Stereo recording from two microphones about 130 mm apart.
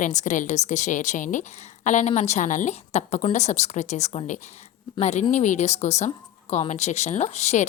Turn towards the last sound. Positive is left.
turn(degrees=60)  # may be behind; listen again after turning